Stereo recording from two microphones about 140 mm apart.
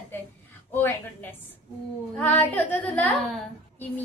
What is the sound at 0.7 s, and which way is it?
A woman's voice, 15° left (ahead or behind).